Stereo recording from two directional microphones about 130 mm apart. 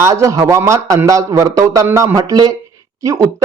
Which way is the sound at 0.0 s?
25° right (ahead or behind).